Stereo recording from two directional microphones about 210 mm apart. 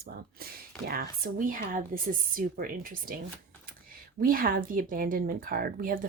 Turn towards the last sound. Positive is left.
turn(degrees=-40)  # may be behind; listen again after turning